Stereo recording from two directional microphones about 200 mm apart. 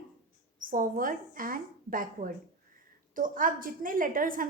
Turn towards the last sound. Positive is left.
turn(degrees=-45)  # may be behind; listen again after turning